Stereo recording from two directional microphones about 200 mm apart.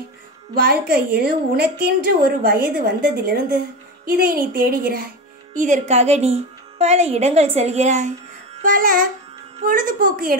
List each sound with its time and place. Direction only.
0.6 s a woman's voice: 50° right (ahead or behind)
8.5 s music: 45° right (ahead or behind)
9.7 s a woman's voice: 45° right (ahead or behind)